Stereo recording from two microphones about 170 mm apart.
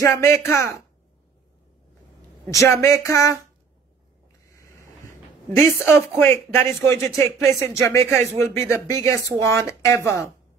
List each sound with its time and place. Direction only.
0.0 s speech: 15° left (ahead or behind)
2.4 s speech: 15° left (ahead or behind)
4.6 s a sound: 15° left (ahead or behind)
5.7 s speech: 15° left (ahead or behind)